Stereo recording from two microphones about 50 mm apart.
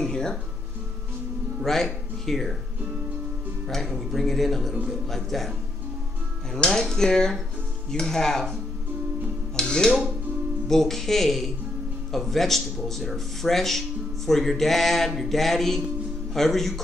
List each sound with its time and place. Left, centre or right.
0.0 s music: centre
1.6 s speech: centre
3.6 s speech: centre
6.5 s speech: centre
9.6 s music: centre
10.7 s speech: centre